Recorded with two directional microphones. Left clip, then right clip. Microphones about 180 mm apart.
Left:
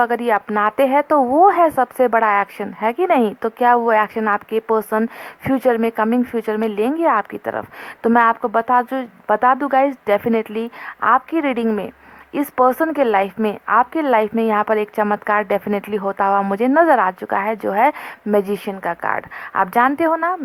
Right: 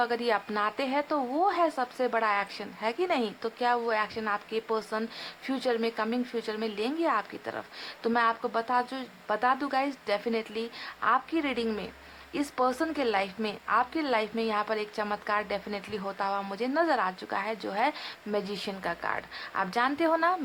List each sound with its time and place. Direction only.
0.0 s a woman's voice: 35° left (ahead or behind)